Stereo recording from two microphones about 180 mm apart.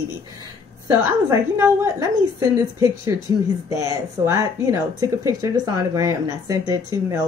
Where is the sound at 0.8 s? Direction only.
15° right (ahead or behind).